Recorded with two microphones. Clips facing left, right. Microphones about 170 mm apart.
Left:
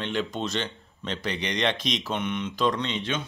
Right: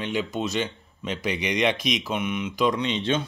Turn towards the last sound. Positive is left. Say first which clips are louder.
# right 5 dB
turn(degrees=-30)  # may be behind; listen again after turning